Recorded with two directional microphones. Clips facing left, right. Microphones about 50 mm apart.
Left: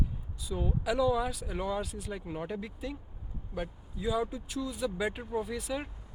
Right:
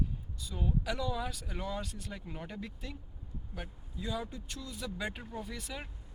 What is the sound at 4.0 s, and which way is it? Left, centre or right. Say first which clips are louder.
Speech: left 7 dB; centre.